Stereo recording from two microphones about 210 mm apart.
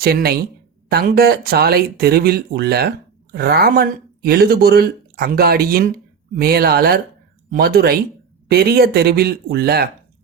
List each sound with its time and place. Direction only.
0.0 s speech: 45° right (ahead or behind)